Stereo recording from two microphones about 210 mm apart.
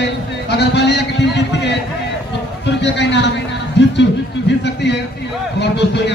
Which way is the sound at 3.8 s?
55° left (ahead or behind).